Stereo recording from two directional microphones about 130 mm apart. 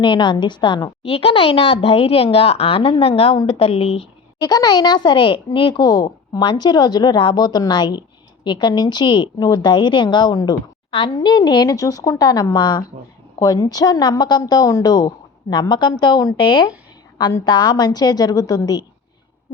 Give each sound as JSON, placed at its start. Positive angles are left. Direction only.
{"t": 0.0, "sound": "a woman's voice", "side_deg": 35}
{"t": 4.4, "sound": "a woman's voice", "side_deg": 30}